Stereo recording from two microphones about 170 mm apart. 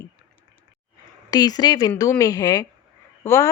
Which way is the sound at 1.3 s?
25° left (ahead or behind).